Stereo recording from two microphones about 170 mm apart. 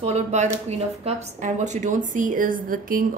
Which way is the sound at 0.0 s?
40° right (ahead or behind).